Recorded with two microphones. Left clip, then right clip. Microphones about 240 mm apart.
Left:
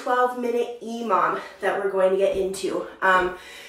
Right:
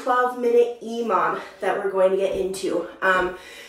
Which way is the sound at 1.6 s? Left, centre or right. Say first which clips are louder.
Right 1 dB; centre.